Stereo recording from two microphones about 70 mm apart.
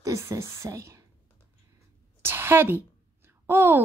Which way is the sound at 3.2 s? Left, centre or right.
Right.